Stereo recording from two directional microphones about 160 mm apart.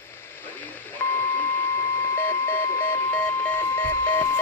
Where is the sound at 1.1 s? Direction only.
10° left (ahead or behind).